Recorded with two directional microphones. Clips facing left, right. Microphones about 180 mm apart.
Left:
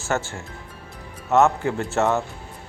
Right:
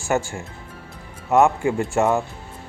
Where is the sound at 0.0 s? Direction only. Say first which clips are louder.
Right 3 dB; 15° right (ahead or behind).